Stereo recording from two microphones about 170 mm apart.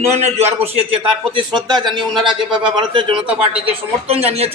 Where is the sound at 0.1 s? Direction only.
40° right (ahead or behind).